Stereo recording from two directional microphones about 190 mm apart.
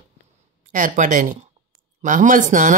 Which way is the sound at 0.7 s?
45° right (ahead or behind).